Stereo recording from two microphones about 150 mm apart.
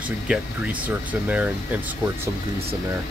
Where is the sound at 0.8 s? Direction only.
10° right (ahead or behind).